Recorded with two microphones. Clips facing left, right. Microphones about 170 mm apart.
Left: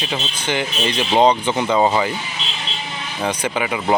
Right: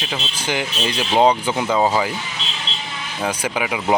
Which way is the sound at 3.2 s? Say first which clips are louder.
Left 1 dB; 5° right (ahead or behind).